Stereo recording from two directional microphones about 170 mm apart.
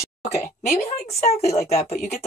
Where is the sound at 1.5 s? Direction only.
40° left (ahead or behind).